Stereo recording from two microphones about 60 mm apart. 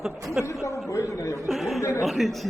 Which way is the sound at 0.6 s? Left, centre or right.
Left.